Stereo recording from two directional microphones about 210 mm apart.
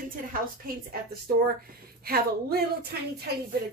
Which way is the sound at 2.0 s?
45° right (ahead or behind).